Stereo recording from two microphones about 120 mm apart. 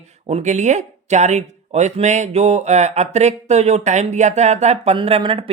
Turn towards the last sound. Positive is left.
turn(degrees=-50)  # may be behind; listen again after turning